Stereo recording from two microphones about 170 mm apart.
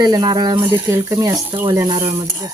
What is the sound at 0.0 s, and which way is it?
Speech, 25° right (ahead or behind).